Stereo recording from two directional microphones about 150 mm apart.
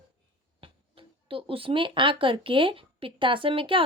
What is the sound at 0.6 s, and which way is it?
A woman's voice, 35° right (ahead or behind).